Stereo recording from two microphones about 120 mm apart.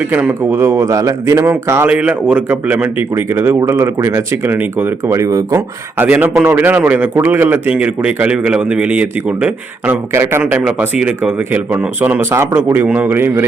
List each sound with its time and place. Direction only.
0.1 s speech: 15° right (ahead or behind)
6.0 s a man's voice: 15° right (ahead or behind)
10.4 s a man's voice: 10° right (ahead or behind)